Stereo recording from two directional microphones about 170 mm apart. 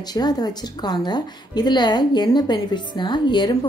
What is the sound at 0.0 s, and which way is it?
A woman's voice, 25° left (ahead or behind).